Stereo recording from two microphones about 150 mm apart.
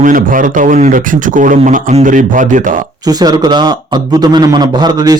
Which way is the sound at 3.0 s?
25° right (ahead or behind).